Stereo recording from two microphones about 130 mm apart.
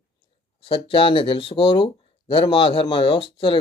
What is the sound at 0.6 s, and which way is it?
Speech, 45° left (ahead or behind).